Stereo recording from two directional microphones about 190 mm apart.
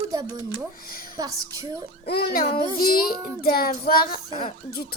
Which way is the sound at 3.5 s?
50° left (ahead or behind).